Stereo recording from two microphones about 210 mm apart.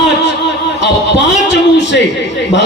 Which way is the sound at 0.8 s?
55° left (ahead or behind).